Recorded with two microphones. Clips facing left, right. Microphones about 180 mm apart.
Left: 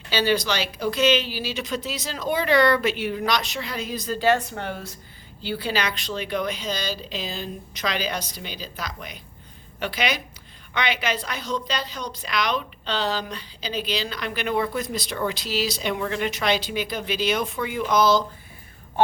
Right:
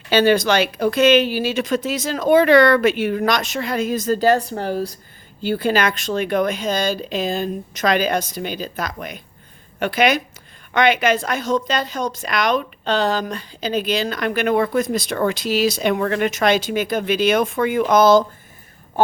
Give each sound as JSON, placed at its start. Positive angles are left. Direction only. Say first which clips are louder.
{"t": 0.1, "sound": "a woman's voice", "louder": "right 8 dB", "side_deg": -55}
{"t": 5.4, "sound": "a woman's voice", "louder": "right 8 dB", "side_deg": -50}